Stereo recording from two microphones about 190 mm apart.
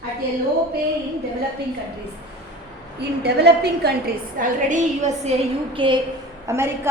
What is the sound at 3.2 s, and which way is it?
A woman's voice, 60° right (ahead or behind).